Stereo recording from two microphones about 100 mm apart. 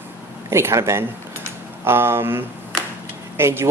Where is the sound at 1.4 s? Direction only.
25° right (ahead or behind).